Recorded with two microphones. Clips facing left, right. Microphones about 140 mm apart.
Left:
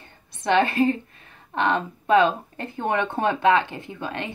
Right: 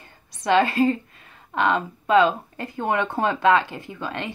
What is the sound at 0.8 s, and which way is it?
Speech, 25° left (ahead or behind).